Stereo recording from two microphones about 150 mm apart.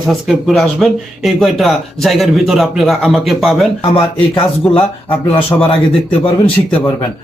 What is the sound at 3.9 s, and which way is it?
Speech, 35° left (ahead or behind).